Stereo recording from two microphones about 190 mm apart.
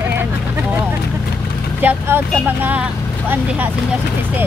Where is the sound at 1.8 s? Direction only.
10° right (ahead or behind).